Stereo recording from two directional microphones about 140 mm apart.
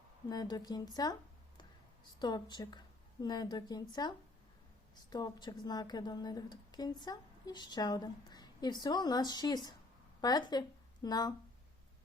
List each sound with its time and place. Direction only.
0.3 s a woman's voice: 30° left (ahead or behind)
2.1 s a woman's voice: 30° left (ahead or behind)
5.1 s a woman's voice: 30° left (ahead or behind)